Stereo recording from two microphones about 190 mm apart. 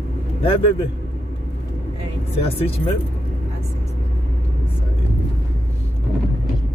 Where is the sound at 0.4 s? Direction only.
30° left (ahead or behind).